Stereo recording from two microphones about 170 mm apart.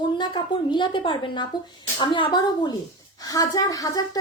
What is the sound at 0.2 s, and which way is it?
A woman's voice, 25° left (ahead or behind).